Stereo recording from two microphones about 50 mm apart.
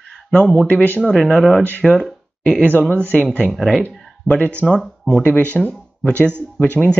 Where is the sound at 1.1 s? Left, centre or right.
Centre.